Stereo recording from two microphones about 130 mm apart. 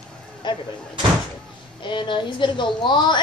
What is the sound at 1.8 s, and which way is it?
A woman's voice, 40° left (ahead or behind).